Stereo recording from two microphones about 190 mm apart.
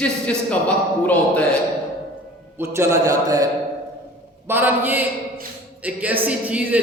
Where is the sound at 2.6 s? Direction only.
15° right (ahead or behind).